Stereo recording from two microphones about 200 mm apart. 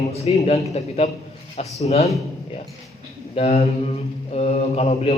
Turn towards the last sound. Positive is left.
turn(degrees=30)  # may be behind; listen again after turning